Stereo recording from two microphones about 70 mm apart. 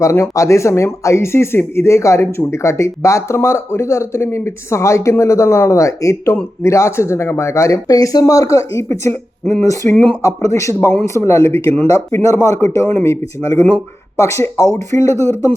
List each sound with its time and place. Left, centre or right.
0.0 s speech: left
10.2 s speech: left
10.8 s speech: left
11.0 s speech: left